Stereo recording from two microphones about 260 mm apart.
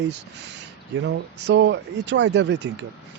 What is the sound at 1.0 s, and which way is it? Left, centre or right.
Speech, right.